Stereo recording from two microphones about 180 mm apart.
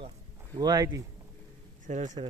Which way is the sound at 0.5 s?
20° right (ahead or behind).